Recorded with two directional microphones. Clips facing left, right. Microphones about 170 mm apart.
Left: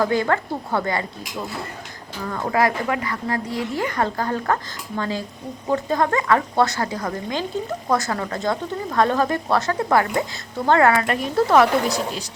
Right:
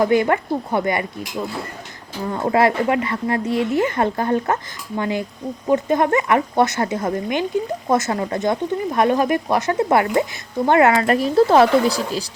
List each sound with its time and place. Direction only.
0.0 s speech: 20° right (ahead or behind)
2.2 s speech: 25° right (ahead or behind)
11.0 s speech: 35° right (ahead or behind)